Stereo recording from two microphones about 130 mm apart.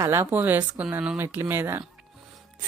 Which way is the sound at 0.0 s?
20° right (ahead or behind).